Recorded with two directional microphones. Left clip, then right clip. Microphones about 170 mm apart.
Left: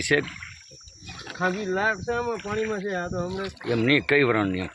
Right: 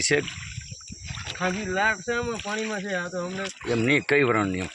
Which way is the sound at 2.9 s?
40° left (ahead or behind).